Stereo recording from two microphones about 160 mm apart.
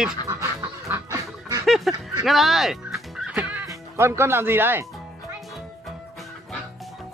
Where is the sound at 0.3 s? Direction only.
20° right (ahead or behind).